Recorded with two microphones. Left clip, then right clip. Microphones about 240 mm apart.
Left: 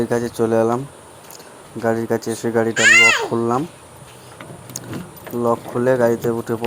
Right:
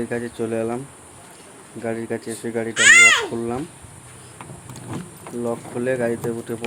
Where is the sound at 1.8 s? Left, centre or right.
Centre.